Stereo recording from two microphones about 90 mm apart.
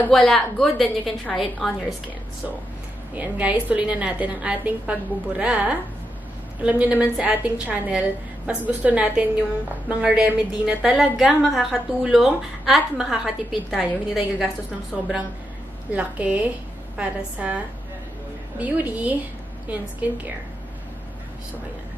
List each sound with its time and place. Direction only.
0.1 s a woman's voice: 5° left (ahead or behind)
3.2 s a woman's voice: 15° right (ahead or behind)
18.6 s a woman's voice: 20° right (ahead or behind)